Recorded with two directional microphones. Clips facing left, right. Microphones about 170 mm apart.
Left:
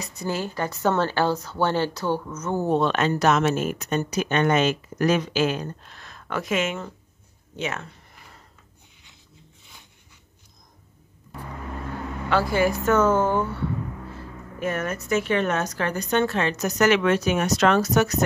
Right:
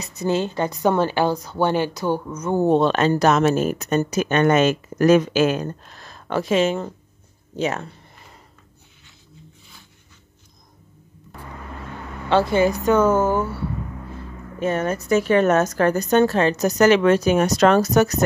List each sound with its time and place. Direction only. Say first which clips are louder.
0.0 s a woman's voice: right 6 dB; 20° right (ahead or behind)
2.6 s speech: right 5 dB; 30° right (ahead or behind)
12.3 s a woman's voice: right 4 dB; 25° right (ahead or behind); by 13.6 s 5° right (ahead or behind)
14.6 s speech: right 5 dB; 30° right (ahead or behind)